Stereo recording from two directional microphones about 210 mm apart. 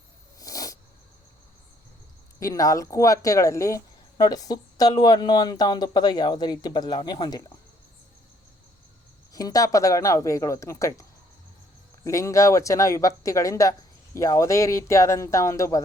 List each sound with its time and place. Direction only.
0.3 s a sound: 15° left (ahead or behind)
2.4 s a woman's voice: 15° left (ahead or behind)
9.3 s speech: 15° left (ahead or behind)
12.0 s speech: 15° left (ahead or behind)